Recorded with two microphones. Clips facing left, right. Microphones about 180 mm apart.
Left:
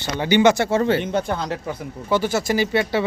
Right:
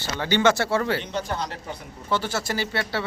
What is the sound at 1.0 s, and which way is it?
Speech, 55° left (ahead or behind).